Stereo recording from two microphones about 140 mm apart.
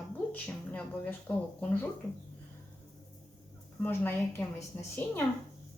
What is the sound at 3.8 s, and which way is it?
Speech, 10° left (ahead or behind).